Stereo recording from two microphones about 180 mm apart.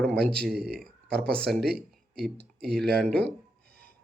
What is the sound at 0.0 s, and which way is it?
Speech, 5° left (ahead or behind).